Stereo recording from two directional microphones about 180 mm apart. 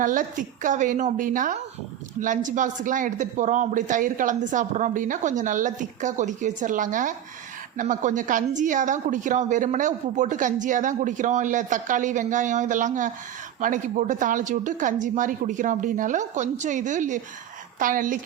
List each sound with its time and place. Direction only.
0.0 s a woman's voice: 50° right (ahead or behind)